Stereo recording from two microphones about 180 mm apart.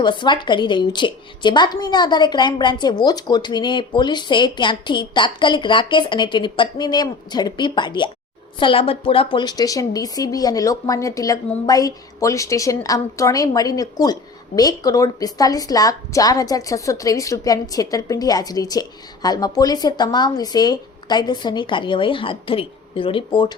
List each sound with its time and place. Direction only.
0.0 s a woman's voice: 25° left (ahead or behind)